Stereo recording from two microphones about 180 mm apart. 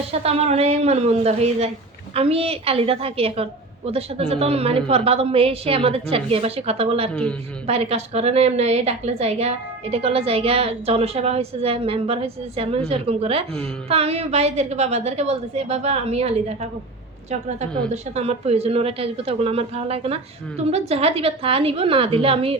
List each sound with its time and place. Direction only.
0.1 s a woman's voice: 35° right (ahead or behind)
7.1 s a woman's voice: 5° left (ahead or behind)
7.7 s a woman's voice: 35° right (ahead or behind)
17.9 s a woman's voice: 35° right (ahead or behind)